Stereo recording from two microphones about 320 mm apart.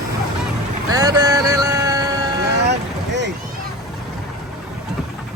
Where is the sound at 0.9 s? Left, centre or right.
Centre.